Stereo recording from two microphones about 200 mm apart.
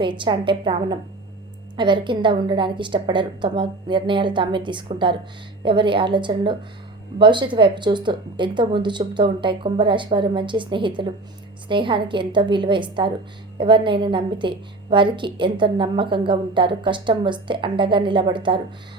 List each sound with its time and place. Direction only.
0.0 s a woman's voice: 25° right (ahead or behind)